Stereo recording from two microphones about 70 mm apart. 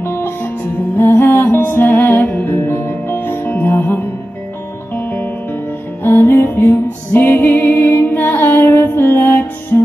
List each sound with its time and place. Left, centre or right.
0.0 s music: left